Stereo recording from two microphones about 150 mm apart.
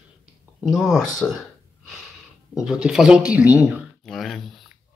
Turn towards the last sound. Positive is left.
turn(degrees=0)  # may be behind; listen again after turning